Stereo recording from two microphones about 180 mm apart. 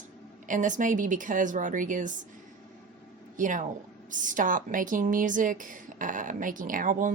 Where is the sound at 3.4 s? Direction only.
45° right (ahead or behind).